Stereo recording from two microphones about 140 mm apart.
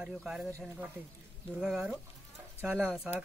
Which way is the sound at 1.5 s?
5° right (ahead or behind).